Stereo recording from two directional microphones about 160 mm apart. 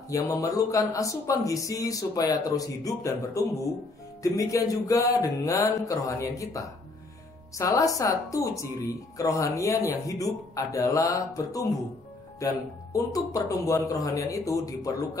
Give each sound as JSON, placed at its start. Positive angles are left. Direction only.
{"t": 0.1, "sound": "speech", "side_deg": 20}
{"t": 12.9, "sound": "speech", "side_deg": 20}